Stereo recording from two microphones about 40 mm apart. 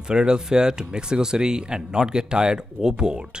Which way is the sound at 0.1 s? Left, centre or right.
Centre.